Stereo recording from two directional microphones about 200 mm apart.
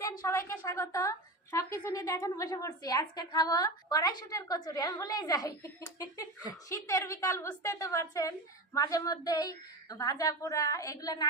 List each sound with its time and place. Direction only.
0.0 s a woman's voice: 15° left (ahead or behind)